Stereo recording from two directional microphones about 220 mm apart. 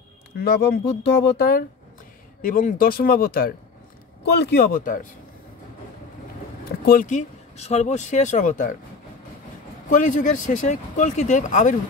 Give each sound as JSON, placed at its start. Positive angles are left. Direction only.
{"t": 0.4, "sound": "speech", "side_deg": 45}
{"t": 6.9, "sound": "speech", "side_deg": 35}
{"t": 9.8, "sound": "speech", "side_deg": 35}